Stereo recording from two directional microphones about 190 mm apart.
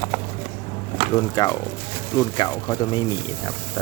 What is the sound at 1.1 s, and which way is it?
Speech, 15° left (ahead or behind).